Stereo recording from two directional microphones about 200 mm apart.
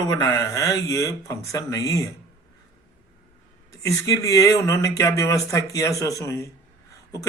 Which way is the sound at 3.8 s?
15° left (ahead or behind).